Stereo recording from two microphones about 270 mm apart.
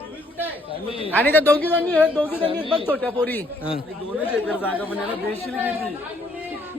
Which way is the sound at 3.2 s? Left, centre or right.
Centre.